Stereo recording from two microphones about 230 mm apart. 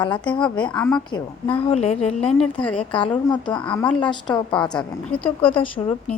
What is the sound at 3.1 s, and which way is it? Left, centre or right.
Speech, centre.